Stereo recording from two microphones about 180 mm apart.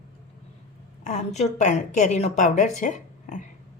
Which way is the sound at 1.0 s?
40° left (ahead or behind).